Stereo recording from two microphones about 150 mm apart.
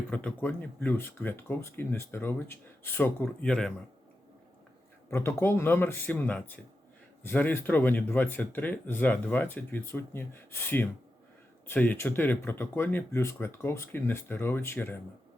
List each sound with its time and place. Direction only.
0.1 s speech: 10° left (ahead or behind)
5.1 s speech: 15° left (ahead or behind)